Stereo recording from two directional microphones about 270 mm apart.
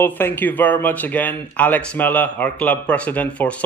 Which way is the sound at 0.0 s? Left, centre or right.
Centre.